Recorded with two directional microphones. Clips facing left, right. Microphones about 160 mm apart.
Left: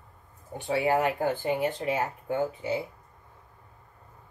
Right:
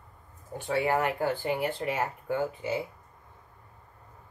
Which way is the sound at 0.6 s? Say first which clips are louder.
Left 2 dB; 10° left (ahead or behind).